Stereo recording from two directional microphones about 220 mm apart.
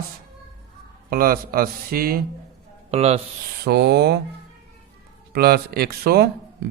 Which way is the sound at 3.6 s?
50° right (ahead or behind).